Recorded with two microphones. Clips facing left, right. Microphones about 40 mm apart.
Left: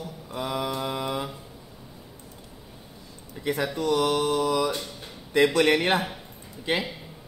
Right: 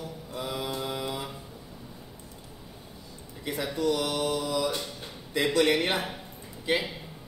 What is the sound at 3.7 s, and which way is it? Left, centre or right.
Mantra, left.